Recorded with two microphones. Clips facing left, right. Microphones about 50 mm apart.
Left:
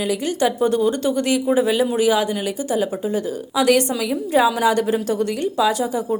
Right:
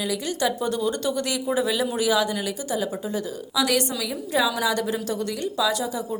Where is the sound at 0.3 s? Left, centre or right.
Left.